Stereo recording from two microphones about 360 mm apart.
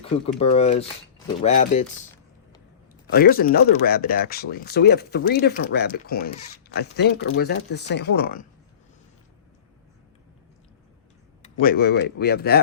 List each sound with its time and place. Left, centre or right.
0.0 s speech: centre
3.1 s speech: left
11.4 s speech: left